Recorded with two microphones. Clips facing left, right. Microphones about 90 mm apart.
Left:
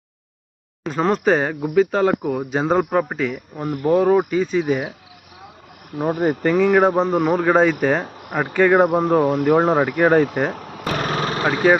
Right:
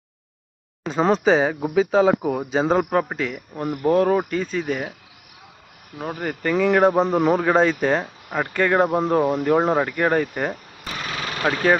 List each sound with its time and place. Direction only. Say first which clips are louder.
0.9 s speech: even; centre (ahead or behind)
6.0 s speech: left 8 dB; 20° left (ahead or behind)
6.6 s speech: even; 5° left (ahead or behind)
10.5 s a sound: left 7 dB; 80° left
10.9 s a sound: left 6 dB; 45° left (ahead or behind)
11.4 s speech: left 2 dB; 10° left (ahead or behind)